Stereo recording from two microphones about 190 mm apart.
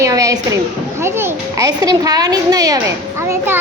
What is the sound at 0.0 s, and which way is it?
A woman's voice, 15° right (ahead or behind).